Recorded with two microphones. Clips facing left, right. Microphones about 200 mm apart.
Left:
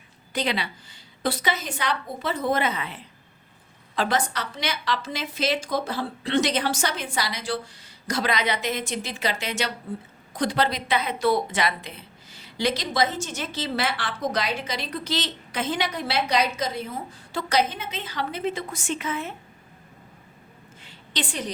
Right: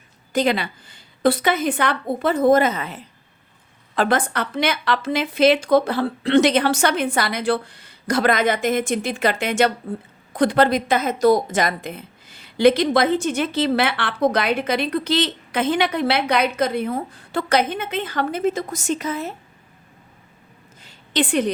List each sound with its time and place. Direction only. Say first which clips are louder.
0.3 s a woman's voice: right 7 dB; 50° right (ahead or behind)
3.9 s a woman's voice: right 5 dB; 55° right (ahead or behind)
20.8 s a sound: right 9 dB; 55° right (ahead or behind)